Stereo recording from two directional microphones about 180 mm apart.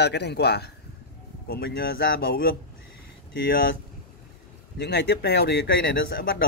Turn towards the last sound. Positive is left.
turn(degrees=60)  # may be behind; listen again after turning